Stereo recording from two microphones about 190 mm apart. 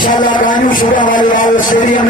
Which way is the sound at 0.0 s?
45° left (ahead or behind).